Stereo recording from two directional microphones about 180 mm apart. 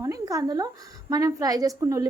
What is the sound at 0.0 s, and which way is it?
A woman's voice, 20° right (ahead or behind).